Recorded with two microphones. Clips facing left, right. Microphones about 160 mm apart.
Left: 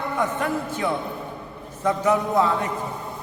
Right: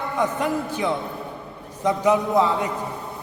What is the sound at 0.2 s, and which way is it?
A man's voice, 15° right (ahead or behind).